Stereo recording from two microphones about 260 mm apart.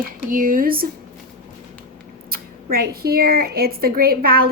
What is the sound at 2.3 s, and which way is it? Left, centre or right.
A woman's voice, right.